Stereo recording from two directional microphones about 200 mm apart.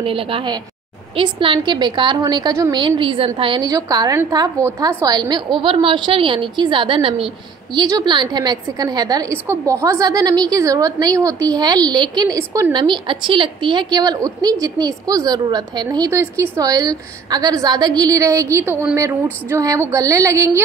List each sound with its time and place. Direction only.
0.0 s a woman's voice: 25° right (ahead or behind)